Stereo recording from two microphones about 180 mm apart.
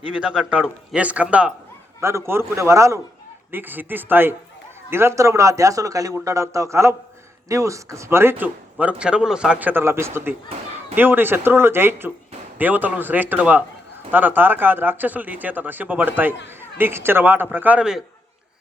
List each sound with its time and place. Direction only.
0.0 s a man's voice: 5° right (ahead or behind)